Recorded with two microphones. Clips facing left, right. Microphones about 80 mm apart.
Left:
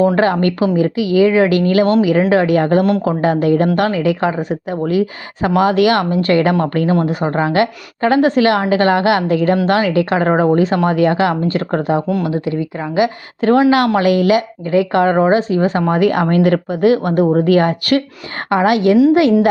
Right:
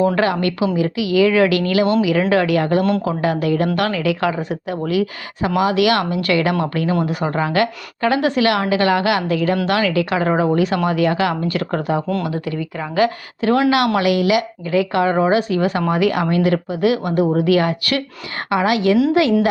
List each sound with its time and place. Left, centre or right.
0.2 s a woman's voice: left
2.3 s a woman's voice: left
12.0 s speech: centre
12.3 s speech: left
13.4 s a woman's voice: left